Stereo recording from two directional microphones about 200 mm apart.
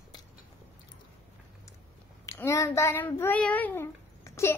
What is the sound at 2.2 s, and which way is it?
Child singing, 15° left (ahead or behind).